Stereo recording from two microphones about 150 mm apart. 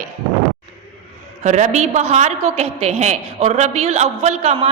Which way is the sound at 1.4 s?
50° right (ahead or behind).